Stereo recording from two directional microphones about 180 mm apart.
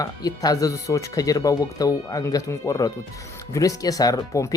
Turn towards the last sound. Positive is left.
turn(degrees=20)  # may be behind; listen again after turning